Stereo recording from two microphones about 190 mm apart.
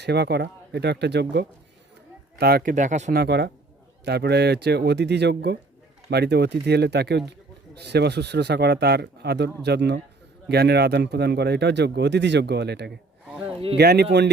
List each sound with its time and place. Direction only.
0.0 s speech: 60° right (ahead or behind); by 3.2 s 40° right (ahead or behind)
3.2 s speech: 60° right (ahead or behind)
13.2 s a sound: 5° right (ahead or behind)
13.7 s speech: 60° right (ahead or behind)